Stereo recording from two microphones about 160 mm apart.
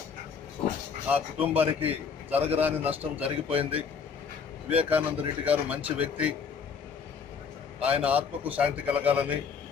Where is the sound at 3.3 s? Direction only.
35° right (ahead or behind).